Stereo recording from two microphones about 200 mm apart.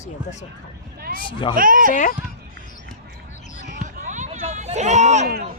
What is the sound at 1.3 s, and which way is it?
Speech, 25° left (ahead or behind).